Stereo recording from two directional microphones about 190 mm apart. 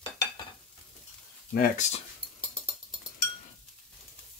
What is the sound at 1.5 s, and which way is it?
Speech, 45° left (ahead or behind).